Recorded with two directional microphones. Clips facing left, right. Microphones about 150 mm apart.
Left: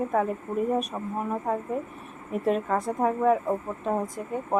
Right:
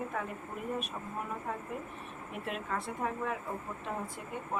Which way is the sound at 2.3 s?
40° left (ahead or behind).